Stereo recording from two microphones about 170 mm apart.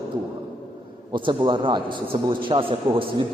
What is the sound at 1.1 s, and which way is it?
A man's voice, 30° right (ahead or behind).